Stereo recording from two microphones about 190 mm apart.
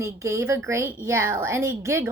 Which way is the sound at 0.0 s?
15° right (ahead or behind).